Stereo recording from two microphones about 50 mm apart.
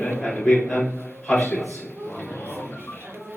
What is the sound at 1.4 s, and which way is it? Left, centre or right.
Speech, left.